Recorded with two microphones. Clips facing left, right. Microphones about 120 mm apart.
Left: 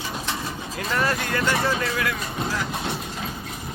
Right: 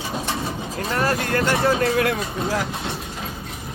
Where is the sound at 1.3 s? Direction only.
50° right (ahead or behind).